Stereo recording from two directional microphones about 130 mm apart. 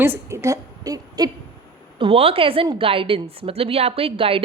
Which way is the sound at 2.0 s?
45° right (ahead or behind).